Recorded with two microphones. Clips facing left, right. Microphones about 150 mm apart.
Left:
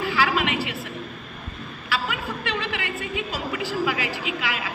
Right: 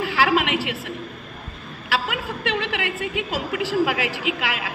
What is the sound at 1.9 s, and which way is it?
A woman's voice, 75° right (ahead or behind).